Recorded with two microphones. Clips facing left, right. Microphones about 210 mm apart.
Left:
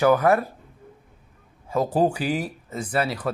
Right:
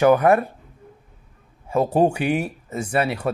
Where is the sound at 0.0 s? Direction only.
30° right (ahead or behind).